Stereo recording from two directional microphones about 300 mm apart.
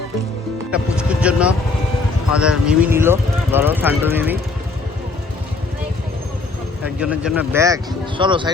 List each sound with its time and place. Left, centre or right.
0.7 s vehicle: centre
2.3 s speech: centre
6.8 s speech: centre